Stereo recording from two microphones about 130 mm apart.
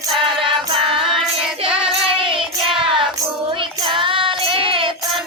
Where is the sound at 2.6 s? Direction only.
40° right (ahead or behind).